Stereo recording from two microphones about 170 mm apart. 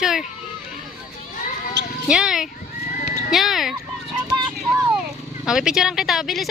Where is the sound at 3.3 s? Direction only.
Centre (ahead or behind).